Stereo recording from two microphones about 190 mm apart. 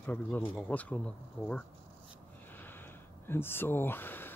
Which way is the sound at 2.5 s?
10° left (ahead or behind).